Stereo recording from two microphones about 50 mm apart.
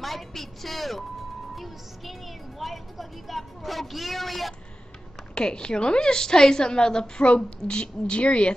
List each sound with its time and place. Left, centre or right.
0.0 s a woman's voice: centre
5.3 s a woman's voice: centre